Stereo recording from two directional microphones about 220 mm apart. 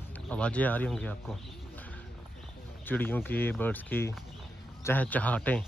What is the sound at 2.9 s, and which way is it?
Speech, 10° left (ahead or behind).